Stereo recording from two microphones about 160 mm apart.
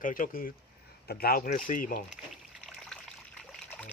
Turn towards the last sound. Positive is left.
turn(degrees=0)  # may be behind; listen again after turning